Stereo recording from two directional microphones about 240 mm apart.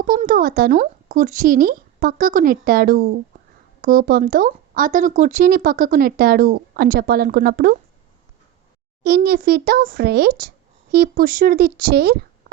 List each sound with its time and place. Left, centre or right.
0.0 s speech: right
9.0 s speech: right